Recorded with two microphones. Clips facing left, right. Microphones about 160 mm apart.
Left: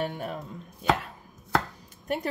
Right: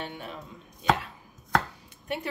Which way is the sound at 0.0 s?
45° left (ahead or behind).